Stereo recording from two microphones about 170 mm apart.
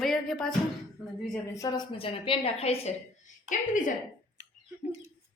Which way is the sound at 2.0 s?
30° left (ahead or behind).